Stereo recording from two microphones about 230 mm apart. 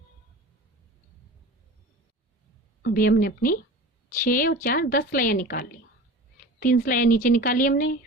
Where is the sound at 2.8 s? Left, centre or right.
Left.